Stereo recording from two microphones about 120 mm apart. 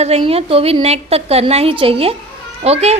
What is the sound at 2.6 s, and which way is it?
Speech, 60° right (ahead or behind).